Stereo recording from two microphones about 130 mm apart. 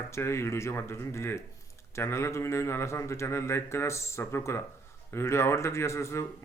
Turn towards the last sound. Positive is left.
turn(degrees=20)  # may be behind; listen again after turning